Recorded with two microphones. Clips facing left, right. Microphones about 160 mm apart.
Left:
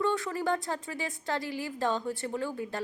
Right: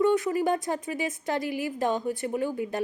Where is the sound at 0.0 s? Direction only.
15° right (ahead or behind).